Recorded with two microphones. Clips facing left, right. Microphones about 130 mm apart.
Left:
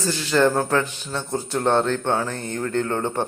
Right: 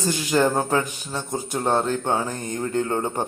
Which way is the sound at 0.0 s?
15° right (ahead or behind).